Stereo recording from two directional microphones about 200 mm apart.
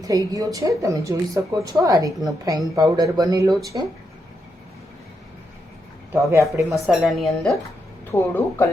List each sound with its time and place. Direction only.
0.3 s a woman's voice: 15° right (ahead or behind)
6.3 s a woman's voice: 15° right (ahead or behind)
6.8 s a woman's voice: centre (ahead or behind)
8.1 s speech: 10° left (ahead or behind)